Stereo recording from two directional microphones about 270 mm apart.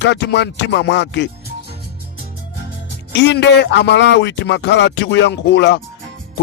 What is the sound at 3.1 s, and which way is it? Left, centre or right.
A man's voice, left.